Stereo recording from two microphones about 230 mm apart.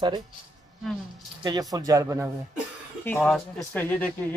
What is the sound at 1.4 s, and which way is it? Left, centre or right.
Speech, centre.